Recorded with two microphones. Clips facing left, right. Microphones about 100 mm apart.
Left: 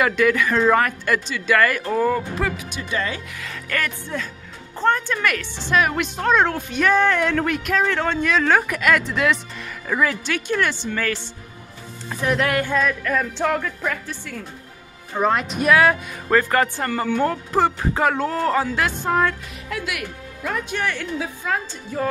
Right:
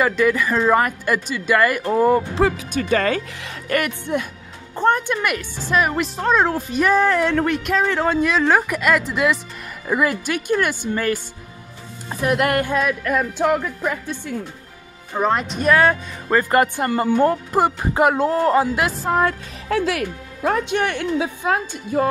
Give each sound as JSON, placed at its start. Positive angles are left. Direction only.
{"t": 0.0, "sound": "speech", "side_deg": 0}
{"t": 1.9, "sound": "speech", "side_deg": -25}
{"t": 2.9, "sound": "speech", "side_deg": -50}
{"t": 3.3, "sound": "a woman's voice", "side_deg": -25}
{"t": 15.1, "sound": "a woman's voice", "side_deg": 0}
{"t": 16.3, "sound": "speech", "side_deg": -15}
{"t": 19.2, "sound": "speech", "side_deg": -30}